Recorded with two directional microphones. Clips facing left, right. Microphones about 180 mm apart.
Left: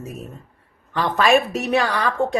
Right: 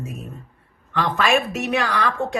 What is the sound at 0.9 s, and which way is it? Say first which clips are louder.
A woman's voice: left 3 dB; 35° left (ahead or behind).